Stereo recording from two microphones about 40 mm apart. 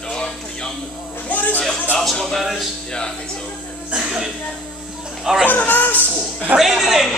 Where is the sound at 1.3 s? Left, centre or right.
Left.